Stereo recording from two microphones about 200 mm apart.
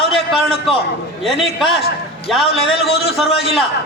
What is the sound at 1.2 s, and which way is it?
Speech, centre (ahead or behind).